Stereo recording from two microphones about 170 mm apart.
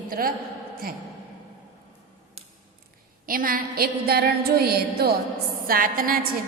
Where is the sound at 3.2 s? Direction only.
55° right (ahead or behind).